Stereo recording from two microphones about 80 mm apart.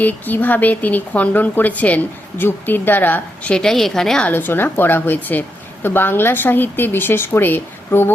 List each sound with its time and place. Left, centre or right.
0.0 s a woman's voice: left
3.5 s a woman's voice: centre
4.3 s a woman's voice: left